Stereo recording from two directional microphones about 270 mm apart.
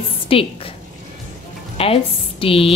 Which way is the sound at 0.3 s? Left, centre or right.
Left.